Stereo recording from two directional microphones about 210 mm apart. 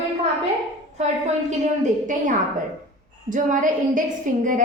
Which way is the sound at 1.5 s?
35° right (ahead or behind).